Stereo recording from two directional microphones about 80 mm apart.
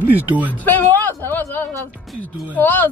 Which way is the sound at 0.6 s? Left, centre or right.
Left.